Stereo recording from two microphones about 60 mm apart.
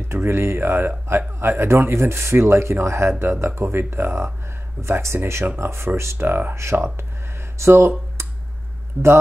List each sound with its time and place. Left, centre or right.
0.1 s speech: right
9.0 s speech: right